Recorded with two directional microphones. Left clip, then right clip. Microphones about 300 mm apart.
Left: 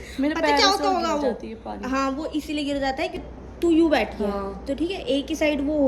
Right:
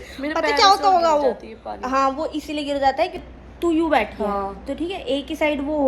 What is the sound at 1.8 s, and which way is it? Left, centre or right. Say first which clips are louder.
A woman's voice: right 6 dB; centre.